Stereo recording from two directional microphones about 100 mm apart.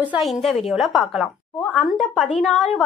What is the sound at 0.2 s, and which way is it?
A woman's voice, centre (ahead or behind).